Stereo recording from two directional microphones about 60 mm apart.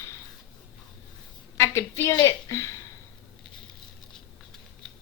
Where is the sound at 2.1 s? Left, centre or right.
Left.